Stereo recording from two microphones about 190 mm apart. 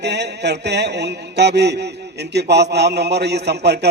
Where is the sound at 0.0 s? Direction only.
60° right (ahead or behind).